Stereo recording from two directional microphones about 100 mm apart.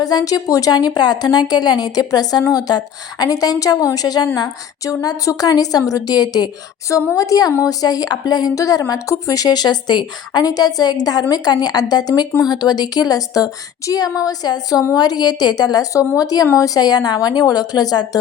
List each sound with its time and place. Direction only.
0.0 s a woman's voice: 40° left (ahead or behind)